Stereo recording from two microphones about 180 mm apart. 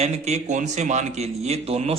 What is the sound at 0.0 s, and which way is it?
A man's voice, 40° right (ahead or behind).